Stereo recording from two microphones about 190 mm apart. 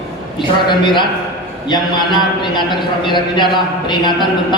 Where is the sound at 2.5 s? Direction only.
25° left (ahead or behind).